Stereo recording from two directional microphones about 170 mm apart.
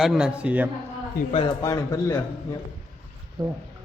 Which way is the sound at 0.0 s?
5° right (ahead or behind).